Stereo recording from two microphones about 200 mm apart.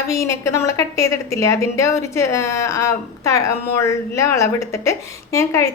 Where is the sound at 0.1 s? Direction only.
15° left (ahead or behind).